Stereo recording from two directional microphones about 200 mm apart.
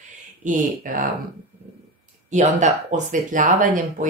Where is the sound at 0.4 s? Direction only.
40° right (ahead or behind).